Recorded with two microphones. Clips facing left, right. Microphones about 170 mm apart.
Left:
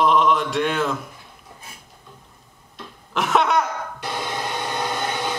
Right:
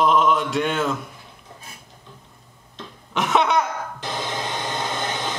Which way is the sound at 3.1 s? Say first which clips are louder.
Even; centre (ahead or behind).